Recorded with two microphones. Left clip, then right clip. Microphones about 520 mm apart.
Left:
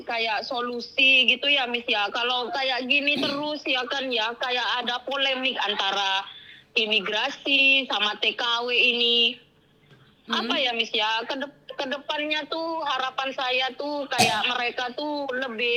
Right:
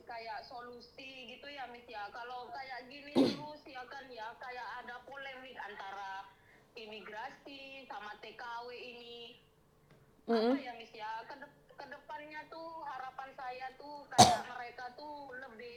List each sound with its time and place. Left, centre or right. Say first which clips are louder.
0.1 s a woman's voice: left 18 dB; left
10.5 s a woman's voice: left 15 dB; left